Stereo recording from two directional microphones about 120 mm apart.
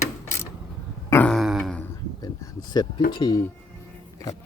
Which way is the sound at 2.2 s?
30° left (ahead or behind).